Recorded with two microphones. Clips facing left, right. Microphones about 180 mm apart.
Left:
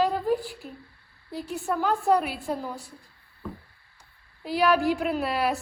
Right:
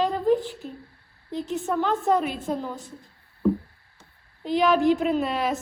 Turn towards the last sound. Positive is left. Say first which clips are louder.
# right 2 dB
turn(degrees=0)  # may be behind; listen again after turning